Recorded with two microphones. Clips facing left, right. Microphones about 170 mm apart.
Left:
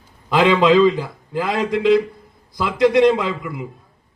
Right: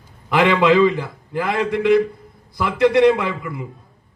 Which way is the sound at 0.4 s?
20° left (ahead or behind).